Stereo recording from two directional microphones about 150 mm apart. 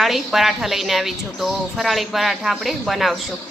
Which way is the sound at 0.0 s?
Centre (ahead or behind).